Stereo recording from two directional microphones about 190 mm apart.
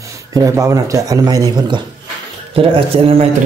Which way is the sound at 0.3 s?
15° right (ahead or behind).